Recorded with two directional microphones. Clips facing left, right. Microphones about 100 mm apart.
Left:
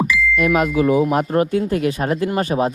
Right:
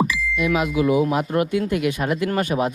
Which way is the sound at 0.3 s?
50° left (ahead or behind).